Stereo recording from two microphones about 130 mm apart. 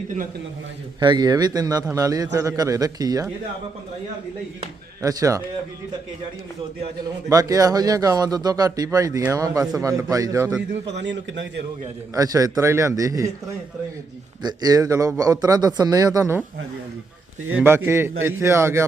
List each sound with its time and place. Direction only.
0.9 s a man's voice: 35° right (ahead or behind)
5.0 s a man's voice: 25° right (ahead or behind)
7.3 s a man's voice: 25° right (ahead or behind)
12.1 s a man's voice: 25° right (ahead or behind)
14.4 s a man's voice: 30° right (ahead or behind)
17.6 s a man's voice: 20° right (ahead or behind)